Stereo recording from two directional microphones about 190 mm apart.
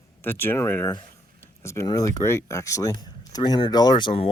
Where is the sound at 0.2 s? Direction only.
10° left (ahead or behind).